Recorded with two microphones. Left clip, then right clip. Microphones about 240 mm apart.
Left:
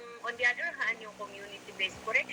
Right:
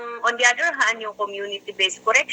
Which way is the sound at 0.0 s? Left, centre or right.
Right.